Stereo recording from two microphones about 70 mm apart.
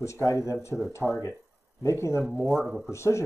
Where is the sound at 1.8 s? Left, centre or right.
Left.